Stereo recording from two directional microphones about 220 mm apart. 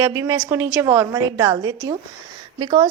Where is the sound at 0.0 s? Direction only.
15° right (ahead or behind).